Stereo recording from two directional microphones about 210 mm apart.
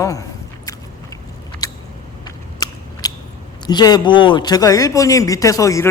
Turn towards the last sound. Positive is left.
turn(degrees=15)  # may be behind; listen again after turning